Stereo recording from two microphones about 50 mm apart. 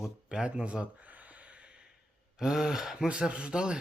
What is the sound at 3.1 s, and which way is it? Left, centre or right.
Speech, right.